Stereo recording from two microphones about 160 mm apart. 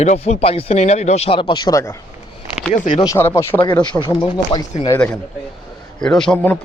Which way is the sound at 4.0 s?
30° left (ahead or behind).